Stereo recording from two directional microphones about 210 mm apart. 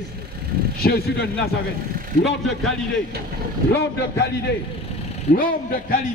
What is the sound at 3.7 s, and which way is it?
A man's voice, 55° left (ahead or behind).